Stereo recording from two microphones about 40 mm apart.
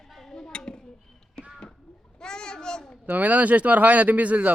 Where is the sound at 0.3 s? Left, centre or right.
Left.